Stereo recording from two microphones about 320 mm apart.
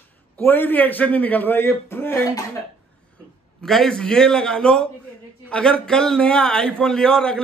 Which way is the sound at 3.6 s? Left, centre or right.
Centre.